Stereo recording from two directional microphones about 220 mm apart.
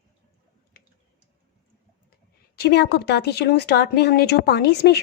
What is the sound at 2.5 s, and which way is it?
A woman's voice, 45° left (ahead or behind).